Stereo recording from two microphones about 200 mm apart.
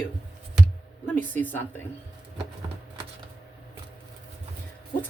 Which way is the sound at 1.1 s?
10° left (ahead or behind).